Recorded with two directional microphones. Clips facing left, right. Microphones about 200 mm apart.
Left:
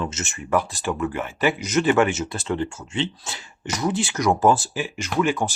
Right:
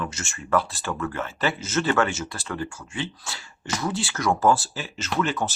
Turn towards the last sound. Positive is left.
turn(degrees=10)  # may be behind; listen again after turning